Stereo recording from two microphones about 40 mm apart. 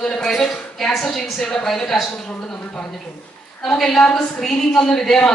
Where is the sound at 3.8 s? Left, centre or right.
Centre.